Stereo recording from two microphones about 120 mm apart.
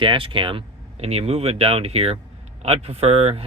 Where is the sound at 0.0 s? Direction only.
45° right (ahead or behind).